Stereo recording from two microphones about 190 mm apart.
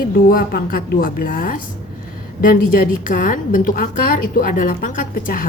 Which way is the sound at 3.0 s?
45° left (ahead or behind).